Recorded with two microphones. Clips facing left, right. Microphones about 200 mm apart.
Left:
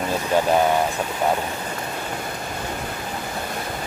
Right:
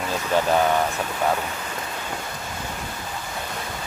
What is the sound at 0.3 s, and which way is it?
Speech, 10° left (ahead or behind).